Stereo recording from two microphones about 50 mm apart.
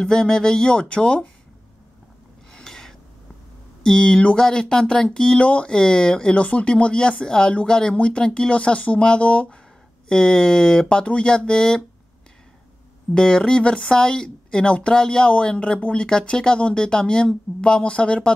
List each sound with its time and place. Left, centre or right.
0.0 s speech: centre
2.5 s filing: centre
3.8 s speech: centre
10.0 s speech: centre
13.1 s speech: centre